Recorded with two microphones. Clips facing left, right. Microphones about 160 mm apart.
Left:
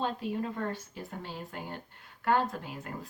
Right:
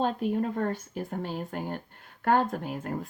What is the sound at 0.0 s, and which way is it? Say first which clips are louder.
A woman's voice: right 6 dB; 50° right (ahead or behind).